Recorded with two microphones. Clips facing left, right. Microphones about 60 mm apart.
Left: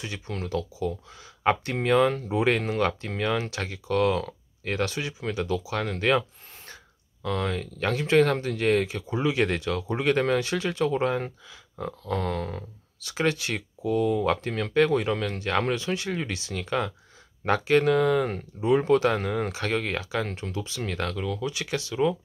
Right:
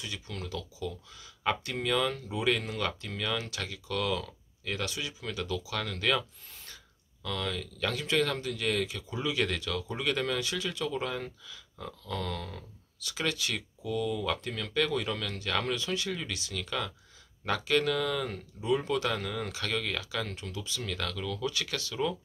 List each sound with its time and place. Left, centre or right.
0.0 s speech: left
7.2 s speech: left